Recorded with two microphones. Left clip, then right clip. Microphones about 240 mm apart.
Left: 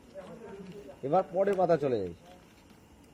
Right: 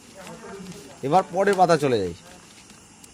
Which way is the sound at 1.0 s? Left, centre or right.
Right.